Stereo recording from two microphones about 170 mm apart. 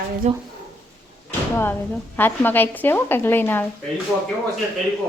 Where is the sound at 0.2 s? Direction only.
40° right (ahead or behind).